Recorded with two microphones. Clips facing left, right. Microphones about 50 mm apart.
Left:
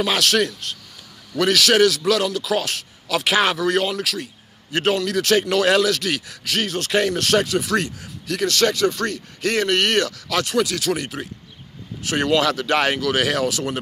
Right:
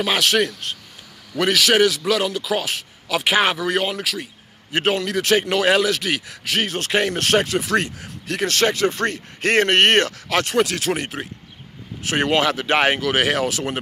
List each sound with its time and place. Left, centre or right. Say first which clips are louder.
0.0 s a man's voice: even; centre